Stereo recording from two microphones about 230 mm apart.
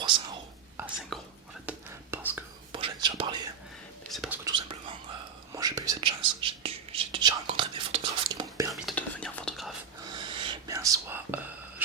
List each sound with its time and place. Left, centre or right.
1.1 s whispering: centre
2.7 s whispering: right
4.1 s whispering: centre
4.4 s whispering: right
8.7 s whispering: centre
10.1 s whispering: centre